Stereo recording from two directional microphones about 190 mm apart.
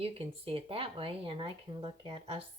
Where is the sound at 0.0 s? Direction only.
30° right (ahead or behind).